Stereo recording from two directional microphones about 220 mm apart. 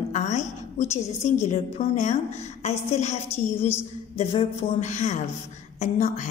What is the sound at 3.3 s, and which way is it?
Speech, 10° left (ahead or behind).